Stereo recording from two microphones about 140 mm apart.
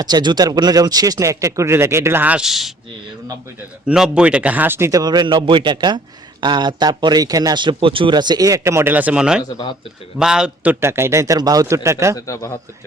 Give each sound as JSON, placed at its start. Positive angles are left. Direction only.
{"t": 0.0, "sound": "a man's voice", "side_deg": -30}
{"t": 3.8, "sound": "a man's voice", "side_deg": -5}
{"t": 9.4, "sound": "speech", "side_deg": 30}
{"t": 10.2, "sound": "a man's voice", "side_deg": -5}
{"t": 12.1, "sound": "speech", "side_deg": 25}